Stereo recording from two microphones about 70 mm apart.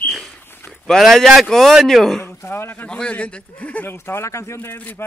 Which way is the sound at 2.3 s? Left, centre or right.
Left.